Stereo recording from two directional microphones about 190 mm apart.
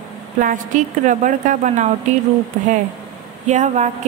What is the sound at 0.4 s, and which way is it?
A woman's voice, 45° right (ahead or behind).